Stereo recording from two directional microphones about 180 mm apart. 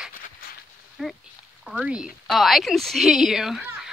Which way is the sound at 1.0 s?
5° right (ahead or behind).